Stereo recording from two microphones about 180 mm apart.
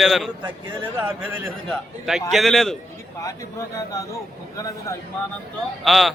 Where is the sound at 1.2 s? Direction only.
15° right (ahead or behind).